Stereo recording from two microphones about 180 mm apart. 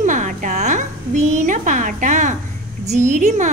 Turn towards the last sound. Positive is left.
turn(degrees=-45)  # may be behind; listen again after turning